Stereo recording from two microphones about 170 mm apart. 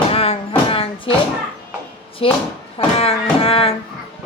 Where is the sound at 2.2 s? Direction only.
35° left (ahead or behind).